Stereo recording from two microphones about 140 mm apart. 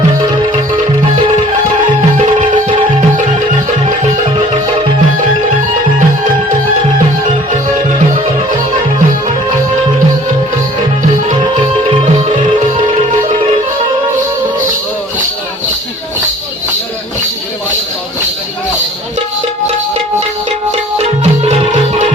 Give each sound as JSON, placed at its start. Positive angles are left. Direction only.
{"t": 21.0, "sound": "music", "side_deg": -50}